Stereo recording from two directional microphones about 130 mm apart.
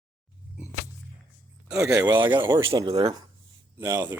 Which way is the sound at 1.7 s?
5° right (ahead or behind).